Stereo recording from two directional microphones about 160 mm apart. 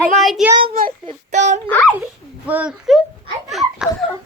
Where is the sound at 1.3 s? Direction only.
45° right (ahead or behind).